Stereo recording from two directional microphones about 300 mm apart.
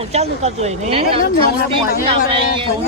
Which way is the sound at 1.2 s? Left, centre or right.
Left.